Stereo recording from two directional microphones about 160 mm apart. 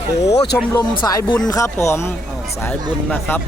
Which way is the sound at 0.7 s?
25° left (ahead or behind).